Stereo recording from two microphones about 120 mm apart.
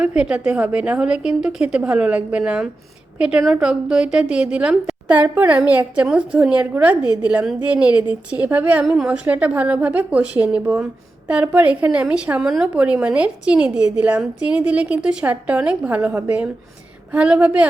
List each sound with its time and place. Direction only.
0.0 s a woman's voice: 10° right (ahead or behind)